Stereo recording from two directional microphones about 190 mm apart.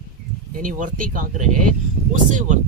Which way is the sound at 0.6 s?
45° right (ahead or behind).